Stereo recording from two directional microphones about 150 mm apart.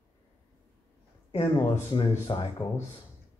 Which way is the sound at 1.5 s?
30° left (ahead or behind).